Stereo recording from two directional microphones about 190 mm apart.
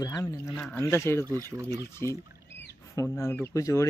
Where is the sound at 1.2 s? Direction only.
15° right (ahead or behind).